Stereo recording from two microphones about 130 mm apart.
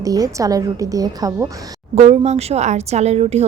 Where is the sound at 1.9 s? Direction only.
55° right (ahead or behind).